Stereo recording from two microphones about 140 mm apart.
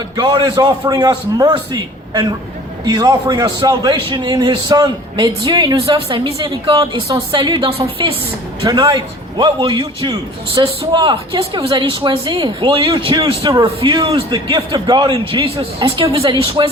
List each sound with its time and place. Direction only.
0.2 s a man's voice: 35° right (ahead or behind)